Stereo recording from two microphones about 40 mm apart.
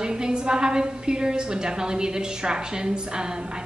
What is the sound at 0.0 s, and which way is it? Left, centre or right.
A woman's voice, centre.